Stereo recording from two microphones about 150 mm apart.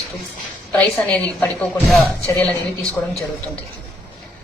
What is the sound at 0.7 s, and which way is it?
A woman's voice, 10° left (ahead or behind).